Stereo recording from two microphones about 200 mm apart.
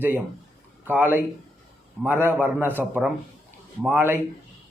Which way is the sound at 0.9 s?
10° right (ahead or behind).